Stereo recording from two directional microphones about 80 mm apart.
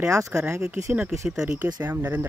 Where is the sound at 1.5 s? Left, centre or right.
Right.